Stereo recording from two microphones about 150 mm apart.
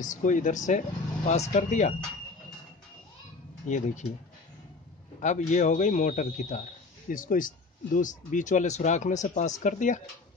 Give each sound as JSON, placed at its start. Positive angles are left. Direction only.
{"t": 0.0, "sound": "speech", "side_deg": 60}
{"t": 3.6, "sound": "speech", "side_deg": 55}
{"t": 5.2, "sound": "speech", "side_deg": 55}